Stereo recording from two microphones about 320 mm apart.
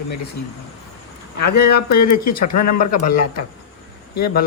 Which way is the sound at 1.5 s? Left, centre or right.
Left.